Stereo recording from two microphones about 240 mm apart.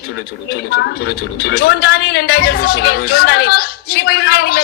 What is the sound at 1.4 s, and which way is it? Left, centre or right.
Speech, left.